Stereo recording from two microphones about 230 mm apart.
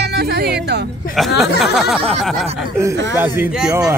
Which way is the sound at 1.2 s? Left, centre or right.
Centre.